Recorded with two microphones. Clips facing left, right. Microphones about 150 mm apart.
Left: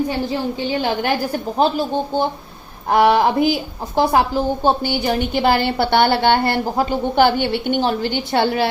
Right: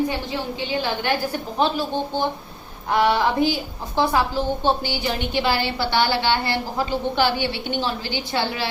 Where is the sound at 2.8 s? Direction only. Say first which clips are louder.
Left 5 dB; 45° left (ahead or behind).